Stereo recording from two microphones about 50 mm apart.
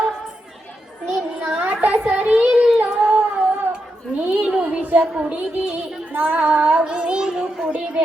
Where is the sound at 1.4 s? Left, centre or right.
Right.